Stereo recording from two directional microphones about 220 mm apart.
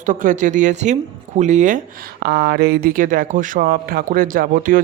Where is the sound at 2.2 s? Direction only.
50° right (ahead or behind).